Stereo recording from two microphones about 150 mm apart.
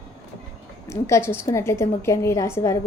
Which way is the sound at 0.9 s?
20° left (ahead or behind).